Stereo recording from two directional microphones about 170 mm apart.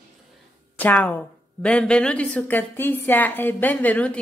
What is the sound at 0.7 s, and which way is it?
A woman's voice, 10° left (ahead or behind).